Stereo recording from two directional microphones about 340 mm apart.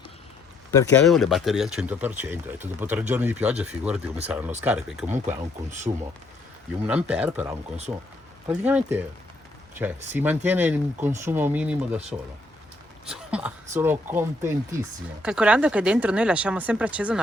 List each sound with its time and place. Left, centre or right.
0.7 s speech: centre
5.9 s speech: centre
6.8 s speech: centre
13.1 s speech: centre